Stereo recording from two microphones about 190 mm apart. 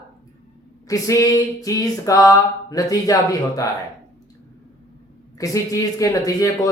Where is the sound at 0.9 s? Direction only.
15° left (ahead or behind).